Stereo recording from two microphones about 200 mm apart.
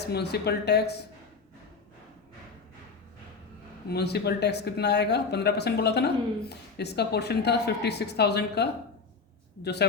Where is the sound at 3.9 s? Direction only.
55° left (ahead or behind).